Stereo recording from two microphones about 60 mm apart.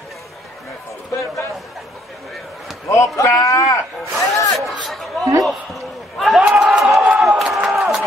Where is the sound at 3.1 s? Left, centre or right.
Left.